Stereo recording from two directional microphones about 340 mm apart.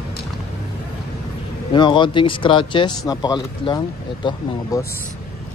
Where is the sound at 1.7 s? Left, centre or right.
Centre.